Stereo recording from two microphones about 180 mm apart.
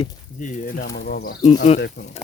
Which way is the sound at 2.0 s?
85° left.